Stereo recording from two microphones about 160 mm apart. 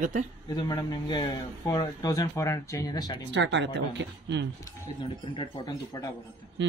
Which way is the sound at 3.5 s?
90° right.